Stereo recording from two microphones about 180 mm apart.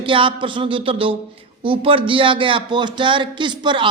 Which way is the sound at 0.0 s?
30° right (ahead or behind).